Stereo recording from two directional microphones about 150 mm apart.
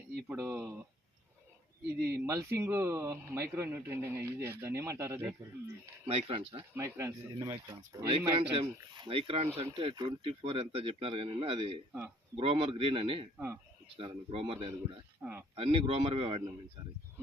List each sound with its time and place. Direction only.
0.3 s speech: 15° right (ahead or behind)
2.0 s speech: 90° right
2.2 s speech: 15° right (ahead or behind)
6.1 s speech: 40° right (ahead or behind)
8.1 s speech: 40° right (ahead or behind)
15.2 s speech: 15° right (ahead or behind)
15.5 s speech: 40° right (ahead or behind)